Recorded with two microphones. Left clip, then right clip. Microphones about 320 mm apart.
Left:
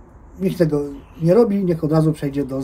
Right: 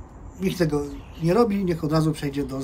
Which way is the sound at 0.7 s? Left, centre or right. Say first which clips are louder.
Left 4 dB; centre.